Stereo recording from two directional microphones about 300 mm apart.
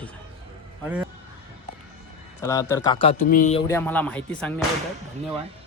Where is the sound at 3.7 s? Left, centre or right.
Centre.